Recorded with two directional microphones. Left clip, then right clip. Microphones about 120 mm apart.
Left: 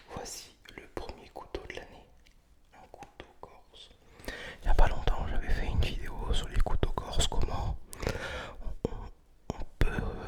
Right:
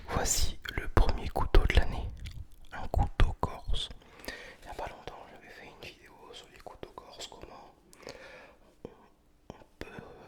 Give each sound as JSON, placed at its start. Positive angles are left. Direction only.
{"t": 0.1, "sound": "whispering", "side_deg": -35}
{"t": 2.7, "sound": "whispering", "side_deg": -75}
{"t": 4.3, "sound": "whispering", "side_deg": 15}
{"t": 4.6, "sound": "whispering", "side_deg": 45}
{"t": 9.5, "sound": "whispering", "side_deg": 50}